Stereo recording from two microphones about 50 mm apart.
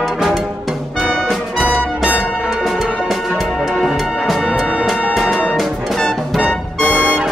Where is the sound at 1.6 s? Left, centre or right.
Right.